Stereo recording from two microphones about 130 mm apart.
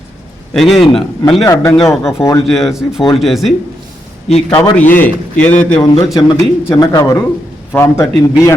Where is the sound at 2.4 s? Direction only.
Centre (ahead or behind).